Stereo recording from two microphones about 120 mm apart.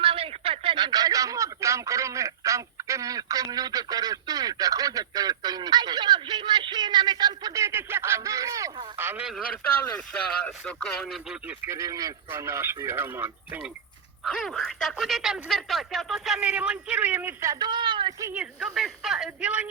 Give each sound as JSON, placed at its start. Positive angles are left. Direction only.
{"t": 0.0, "sound": "speech", "side_deg": -50}
{"t": 10.1, "sound": "speech", "side_deg": 10}
{"t": 11.4, "sound": "speech", "side_deg": -20}
{"t": 14.3, "sound": "speech", "side_deg": 5}
{"t": 18.3, "sound": "speech", "side_deg": 0}